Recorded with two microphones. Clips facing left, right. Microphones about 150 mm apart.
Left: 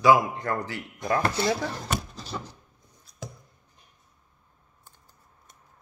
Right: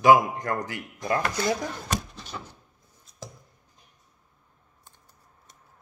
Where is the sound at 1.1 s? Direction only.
30° left (ahead or behind).